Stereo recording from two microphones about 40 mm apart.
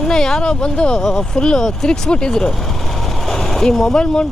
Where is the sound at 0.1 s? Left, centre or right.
Centre.